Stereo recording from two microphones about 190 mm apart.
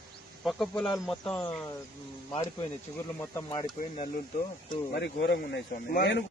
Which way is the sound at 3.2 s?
15° left (ahead or behind).